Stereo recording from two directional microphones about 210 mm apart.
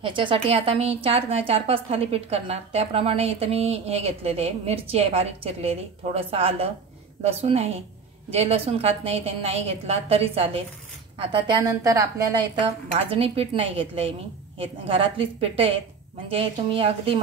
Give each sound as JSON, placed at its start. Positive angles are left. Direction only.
{"t": 0.0, "sound": "a woman's voice", "side_deg": -25}
{"t": 13.1, "sound": "a woman's voice", "side_deg": -25}